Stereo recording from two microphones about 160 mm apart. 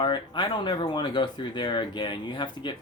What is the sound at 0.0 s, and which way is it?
Speech, 30° left (ahead or behind).